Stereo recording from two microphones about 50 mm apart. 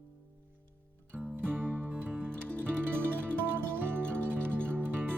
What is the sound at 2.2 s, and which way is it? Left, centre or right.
Music, right.